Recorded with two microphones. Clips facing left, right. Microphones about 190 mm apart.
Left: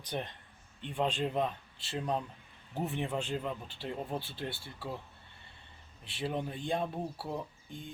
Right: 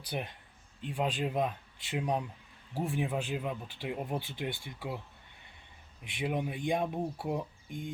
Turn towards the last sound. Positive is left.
turn(degrees=-15)  # may be behind; listen again after turning